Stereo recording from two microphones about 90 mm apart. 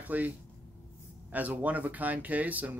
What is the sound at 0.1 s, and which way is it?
Speech, 20° right (ahead or behind).